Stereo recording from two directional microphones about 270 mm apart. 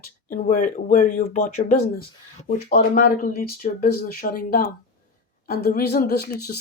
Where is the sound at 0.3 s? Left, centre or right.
Left.